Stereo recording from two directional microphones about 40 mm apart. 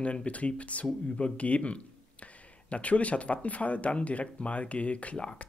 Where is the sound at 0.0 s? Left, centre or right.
Left.